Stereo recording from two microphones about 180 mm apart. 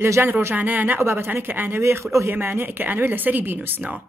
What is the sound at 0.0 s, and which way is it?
Speech, 15° right (ahead or behind).